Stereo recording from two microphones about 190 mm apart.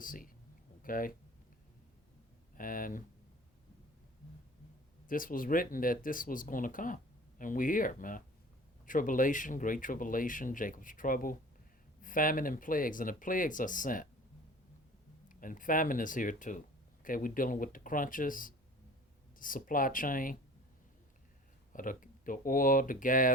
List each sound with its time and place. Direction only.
0.0 s a sound: 45° left (ahead or behind)
0.8 s speech: 45° left (ahead or behind)
2.6 s speech: 45° left (ahead or behind)
5.0 s speech: 45° left (ahead or behind)
15.3 s speech: 45° left (ahead or behind)
21.7 s speech: 45° left (ahead or behind)